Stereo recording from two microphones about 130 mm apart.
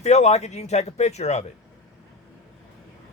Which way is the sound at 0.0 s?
60° left (ahead or behind).